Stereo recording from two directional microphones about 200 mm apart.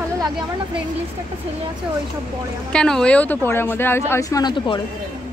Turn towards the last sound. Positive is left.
turn(degrees=20)  # may be behind; listen again after turning